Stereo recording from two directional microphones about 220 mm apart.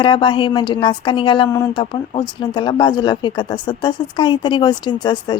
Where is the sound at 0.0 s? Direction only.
20° left (ahead or behind).